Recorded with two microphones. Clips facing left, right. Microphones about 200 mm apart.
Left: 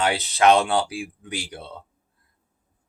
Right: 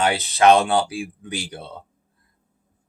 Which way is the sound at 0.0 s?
20° right (ahead or behind).